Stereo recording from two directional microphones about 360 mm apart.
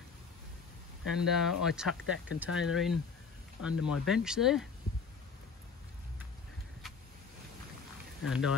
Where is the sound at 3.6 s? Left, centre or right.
Left.